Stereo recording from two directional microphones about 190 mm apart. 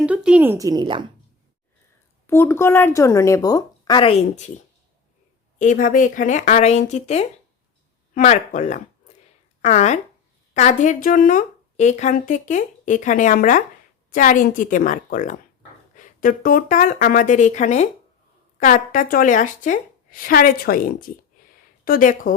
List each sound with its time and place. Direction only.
0.0 s speech: 5° right (ahead or behind); by 1.0 s 25° right (ahead or behind)
2.2 s a woman's voice: 10° left (ahead or behind); by 22.4 s 45° left (ahead or behind)